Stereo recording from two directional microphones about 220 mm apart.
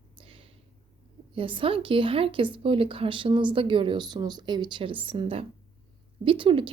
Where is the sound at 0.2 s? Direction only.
25° right (ahead or behind).